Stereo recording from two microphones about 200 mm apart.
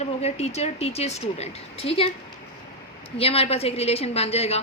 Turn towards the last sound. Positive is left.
turn(degrees=30)  # may be behind; listen again after turning